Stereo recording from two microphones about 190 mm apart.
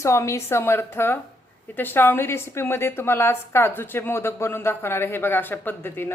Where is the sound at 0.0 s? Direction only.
15° left (ahead or behind).